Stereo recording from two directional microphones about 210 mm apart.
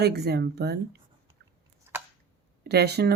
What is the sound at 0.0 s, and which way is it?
Speech, 50° right (ahead or behind).